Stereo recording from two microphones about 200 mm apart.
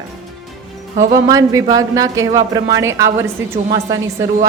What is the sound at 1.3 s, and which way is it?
A woman's voice, 15° right (ahead or behind).